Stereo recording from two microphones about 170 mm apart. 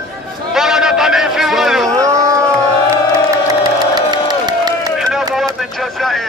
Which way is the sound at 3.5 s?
25° right (ahead or behind).